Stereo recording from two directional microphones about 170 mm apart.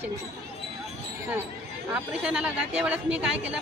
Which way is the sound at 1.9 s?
5° right (ahead or behind).